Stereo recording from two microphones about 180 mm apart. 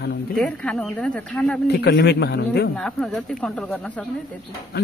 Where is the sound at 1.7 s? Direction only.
80° left.